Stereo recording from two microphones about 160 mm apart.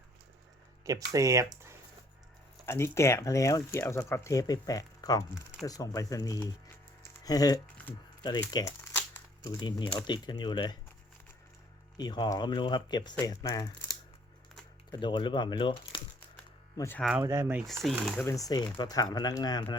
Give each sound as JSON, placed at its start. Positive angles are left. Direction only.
{"t": 0.9, "sound": "speech", "side_deg": -20}
{"t": 2.6, "sound": "speech", "side_deg": 15}
{"t": 9.0, "sound": "crumpling", "side_deg": 10}
{"t": 9.6, "sound": "speech", "side_deg": 25}
{"t": 11.9, "sound": "speech", "side_deg": 25}
{"t": 14.9, "sound": "speech", "side_deg": 30}
{"t": 16.7, "sound": "speech", "side_deg": 15}
{"t": 17.2, "sound": "speech", "side_deg": -15}
{"t": 18.2, "sound": "speech", "side_deg": 20}